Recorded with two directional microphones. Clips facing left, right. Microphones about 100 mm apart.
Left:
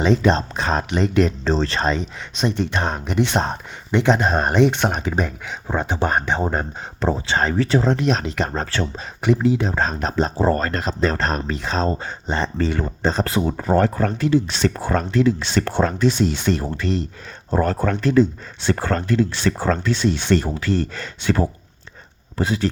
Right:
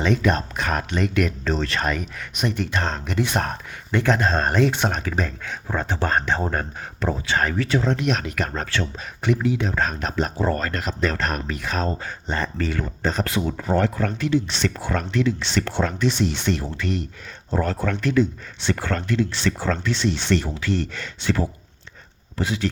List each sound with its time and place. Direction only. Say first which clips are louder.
0.0 s speech: left 4 dB; 30° left (ahead or behind)